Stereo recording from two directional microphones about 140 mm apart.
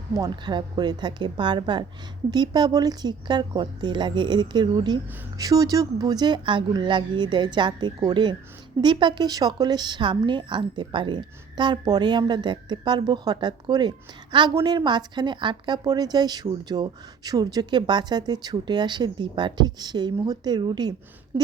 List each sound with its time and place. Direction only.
0.2 s a woman's voice: 30° right (ahead or behind)